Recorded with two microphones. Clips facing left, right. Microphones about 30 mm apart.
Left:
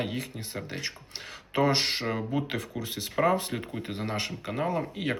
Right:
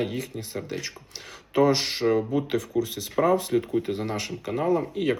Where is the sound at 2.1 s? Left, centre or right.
Centre.